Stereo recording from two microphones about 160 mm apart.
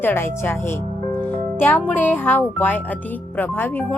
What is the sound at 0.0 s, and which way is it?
A woman's voice, 15° left (ahead or behind).